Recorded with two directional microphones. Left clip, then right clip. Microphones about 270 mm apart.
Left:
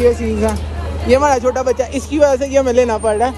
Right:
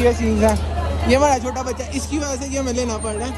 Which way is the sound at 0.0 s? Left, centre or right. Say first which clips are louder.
Left 3 dB; centre.